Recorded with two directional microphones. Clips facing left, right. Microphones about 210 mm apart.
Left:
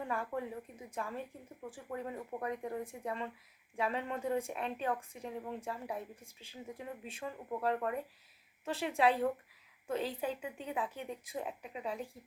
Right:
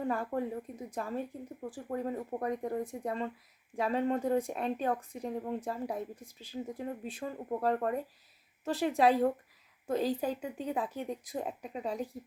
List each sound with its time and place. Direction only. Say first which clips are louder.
0.0 s speech: right 5 dB; 40° right (ahead or behind)